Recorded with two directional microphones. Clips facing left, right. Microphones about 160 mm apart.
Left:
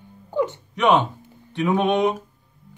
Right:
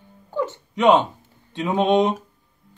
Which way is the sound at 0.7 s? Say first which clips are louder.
Right 2 dB; 15° right (ahead or behind).